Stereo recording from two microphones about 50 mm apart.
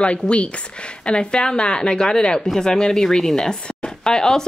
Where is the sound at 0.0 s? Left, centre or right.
Left.